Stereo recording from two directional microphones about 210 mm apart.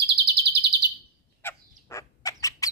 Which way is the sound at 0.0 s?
50° right (ahead or behind).